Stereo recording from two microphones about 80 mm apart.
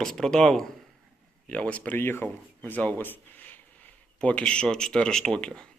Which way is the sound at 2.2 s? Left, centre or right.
Centre.